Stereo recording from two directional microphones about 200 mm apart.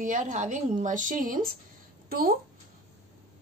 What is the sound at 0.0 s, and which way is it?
Speech, 40° right (ahead or behind).